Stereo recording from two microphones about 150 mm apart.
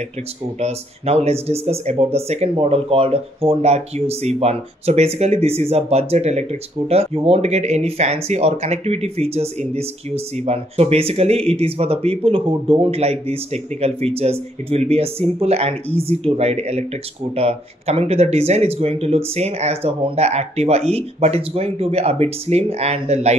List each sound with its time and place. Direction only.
0.6 s speech: 45° right (ahead or behind)